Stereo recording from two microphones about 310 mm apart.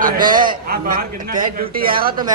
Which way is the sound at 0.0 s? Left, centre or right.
Right.